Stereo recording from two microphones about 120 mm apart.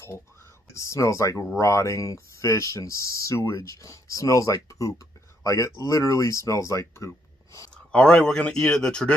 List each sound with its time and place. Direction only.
0.7 s speech: 25° left (ahead or behind)
7.7 s speech: 5° left (ahead or behind)